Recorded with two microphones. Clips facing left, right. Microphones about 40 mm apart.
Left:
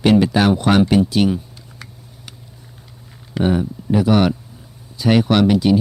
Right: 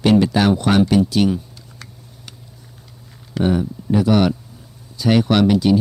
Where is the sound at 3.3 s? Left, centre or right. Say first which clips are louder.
Even; centre.